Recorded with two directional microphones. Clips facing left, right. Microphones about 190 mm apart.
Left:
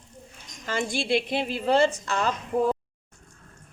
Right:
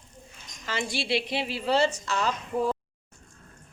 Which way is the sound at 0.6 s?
45° left (ahead or behind).